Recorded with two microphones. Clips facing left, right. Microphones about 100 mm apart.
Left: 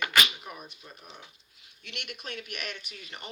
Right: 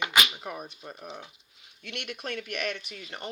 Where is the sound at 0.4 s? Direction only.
45° right (ahead or behind).